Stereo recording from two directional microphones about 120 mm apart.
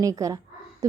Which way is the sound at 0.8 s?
25° right (ahead or behind).